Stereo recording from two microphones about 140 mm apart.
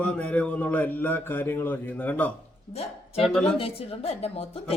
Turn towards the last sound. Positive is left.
turn(degrees=45)  # may be behind; listen again after turning